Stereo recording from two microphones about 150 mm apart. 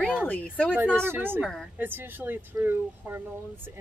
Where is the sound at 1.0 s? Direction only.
15° right (ahead or behind).